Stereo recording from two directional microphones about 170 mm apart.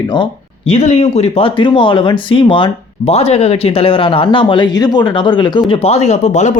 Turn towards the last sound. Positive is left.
turn(degrees=45)  # may be behind; listen again after turning